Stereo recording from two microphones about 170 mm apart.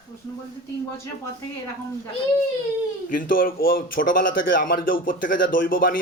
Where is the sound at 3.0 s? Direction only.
55° left (ahead or behind).